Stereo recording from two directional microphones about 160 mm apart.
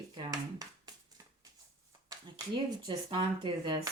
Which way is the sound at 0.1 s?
25° right (ahead or behind).